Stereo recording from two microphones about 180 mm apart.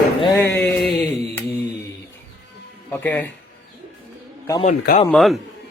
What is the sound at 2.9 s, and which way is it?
Speech, 10° left (ahead or behind).